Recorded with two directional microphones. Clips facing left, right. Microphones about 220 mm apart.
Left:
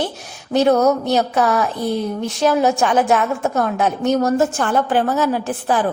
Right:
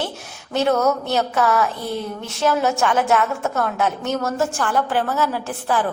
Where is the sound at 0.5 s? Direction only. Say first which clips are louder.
Left 4 dB; 15° left (ahead or behind).